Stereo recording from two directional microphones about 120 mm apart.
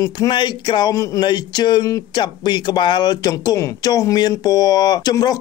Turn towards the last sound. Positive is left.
turn(degrees=30)  # may be behind; listen again after turning